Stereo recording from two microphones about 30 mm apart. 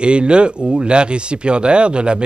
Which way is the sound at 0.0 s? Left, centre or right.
Right.